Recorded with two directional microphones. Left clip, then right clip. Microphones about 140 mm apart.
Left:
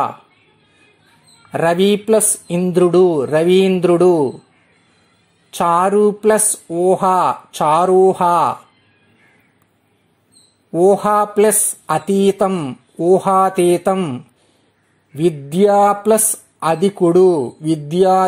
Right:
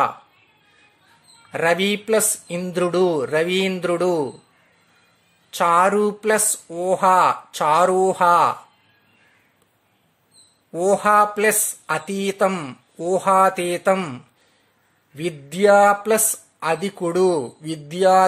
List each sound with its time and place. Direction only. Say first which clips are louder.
1.5 s a woman's voice: left 5 dB; 20° left (ahead or behind)
5.5 s a woman's voice: left 2 dB; 20° left (ahead or behind)
10.7 s a woman's voice: left 4 dB; 20° left (ahead or behind)